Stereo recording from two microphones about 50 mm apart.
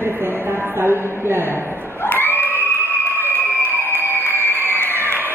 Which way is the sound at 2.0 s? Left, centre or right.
Left.